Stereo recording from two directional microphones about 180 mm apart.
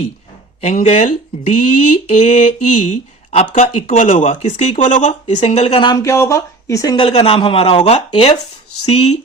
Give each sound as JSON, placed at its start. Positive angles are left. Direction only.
{"t": 0.6, "sound": "speech", "side_deg": 40}
{"t": 5.8, "sound": "speech", "side_deg": 20}
{"t": 6.9, "sound": "speech", "side_deg": 30}